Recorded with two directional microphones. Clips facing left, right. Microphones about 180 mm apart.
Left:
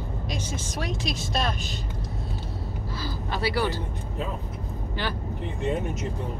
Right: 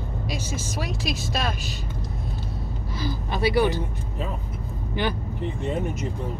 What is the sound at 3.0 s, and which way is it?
Speech, 15° right (ahead or behind).